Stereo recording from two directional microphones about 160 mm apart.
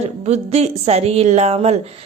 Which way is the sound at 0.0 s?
40° right (ahead or behind).